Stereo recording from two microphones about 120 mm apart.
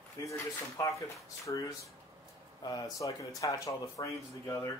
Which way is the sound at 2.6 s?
30° left (ahead or behind).